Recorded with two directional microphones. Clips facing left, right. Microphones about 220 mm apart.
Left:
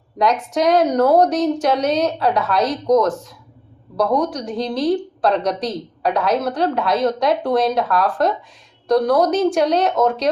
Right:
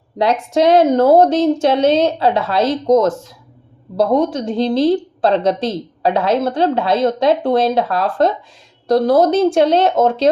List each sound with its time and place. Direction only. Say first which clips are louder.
0.2 s a woman's voice: right 3 dB; 30° right (ahead or behind)